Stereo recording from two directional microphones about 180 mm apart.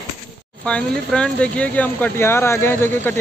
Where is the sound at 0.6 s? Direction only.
5° left (ahead or behind).